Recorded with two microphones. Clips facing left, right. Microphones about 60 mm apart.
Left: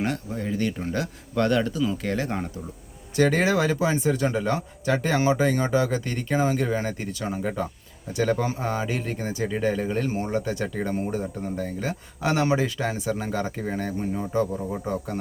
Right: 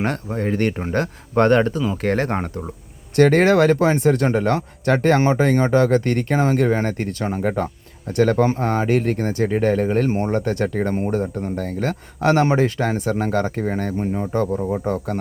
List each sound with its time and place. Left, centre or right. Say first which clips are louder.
0.0 s speech: right 5 dB; right
14.0 s speech: right 5 dB; right
14.8 s speech: right 6 dB; right